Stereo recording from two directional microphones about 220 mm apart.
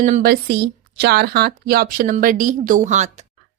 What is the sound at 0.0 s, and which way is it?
Speech, 40° right (ahead or behind).